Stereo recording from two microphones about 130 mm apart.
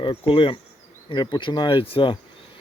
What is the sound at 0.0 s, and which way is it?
Speech, 40° left (ahead or behind).